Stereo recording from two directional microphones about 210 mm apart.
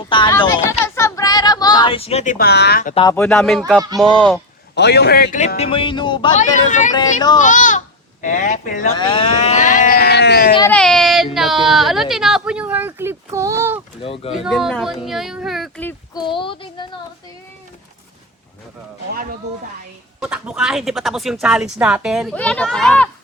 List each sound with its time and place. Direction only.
0.1 s a sound: 20° left (ahead or behind); by 2.9 s 45° left (ahead or behind)
2.9 s speech: 20° left (ahead or behind)
3.2 s speech: centre (ahead or behind)
4.7 s a man's voice: 55° left (ahead or behind); by 6.3 s 20° left (ahead or behind)
6.4 s a man's voice: 35° left (ahead or behind)
6.9 s speech: 20° left (ahead or behind)
7.4 s a man's voice: 35° left (ahead or behind)
9.0 s a man's voice: 25° left (ahead or behind); by 10.5 s 50° left (ahead or behind)
10.7 s speech: 5° left (ahead or behind)
14.0 s speech: 25° left (ahead or behind)
14.4 s speech: centre (ahead or behind)
15.9 s speech: 20° left (ahead or behind)
19.1 s speech: 45° right (ahead or behind)
20.1 s speech: 5° right (ahead or behind)